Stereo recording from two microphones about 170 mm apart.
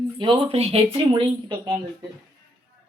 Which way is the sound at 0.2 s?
30° right (ahead or behind).